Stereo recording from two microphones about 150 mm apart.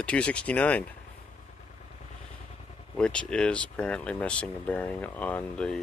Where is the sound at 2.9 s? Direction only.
5° left (ahead or behind).